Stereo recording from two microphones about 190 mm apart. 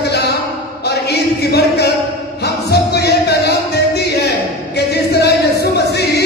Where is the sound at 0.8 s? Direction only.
60° left (ahead or behind).